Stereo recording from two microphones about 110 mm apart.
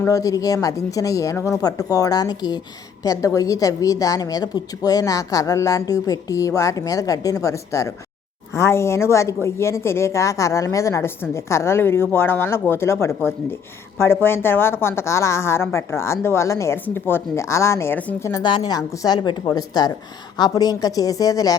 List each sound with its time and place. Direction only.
0.0 s a woman's voice: 30° left (ahead or behind)
18.4 s a woman's voice: 40° left (ahead or behind)